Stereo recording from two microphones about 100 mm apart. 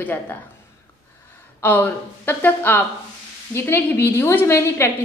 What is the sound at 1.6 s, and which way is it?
A woman's voice, 20° left (ahead or behind).